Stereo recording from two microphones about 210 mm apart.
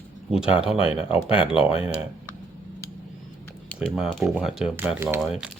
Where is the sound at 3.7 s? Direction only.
Centre (ahead or behind).